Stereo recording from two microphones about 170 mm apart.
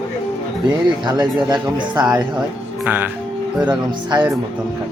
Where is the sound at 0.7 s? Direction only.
25° right (ahead or behind).